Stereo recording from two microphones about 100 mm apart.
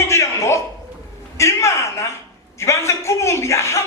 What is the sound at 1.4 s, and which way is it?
A man's voice, 30° left (ahead or behind).